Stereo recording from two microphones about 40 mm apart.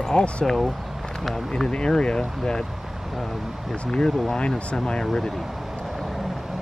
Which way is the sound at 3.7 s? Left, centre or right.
Centre.